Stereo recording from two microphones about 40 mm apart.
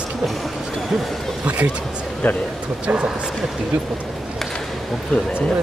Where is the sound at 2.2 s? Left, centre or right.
Left.